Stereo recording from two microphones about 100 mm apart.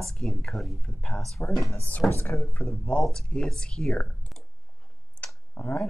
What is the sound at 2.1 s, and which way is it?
Speech, 20° left (ahead or behind).